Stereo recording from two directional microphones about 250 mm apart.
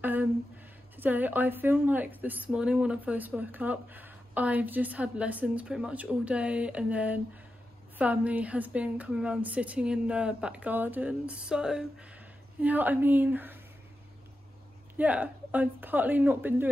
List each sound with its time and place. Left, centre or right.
0.0 s a sound: centre
0.9 s a woman's voice: centre
15.0 s a woman's voice: centre